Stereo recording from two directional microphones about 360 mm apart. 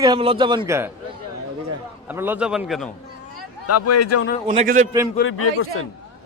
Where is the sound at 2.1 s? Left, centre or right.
Centre.